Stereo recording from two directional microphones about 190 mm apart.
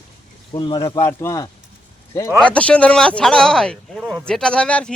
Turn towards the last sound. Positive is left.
turn(degrees=5)  # may be behind; listen again after turning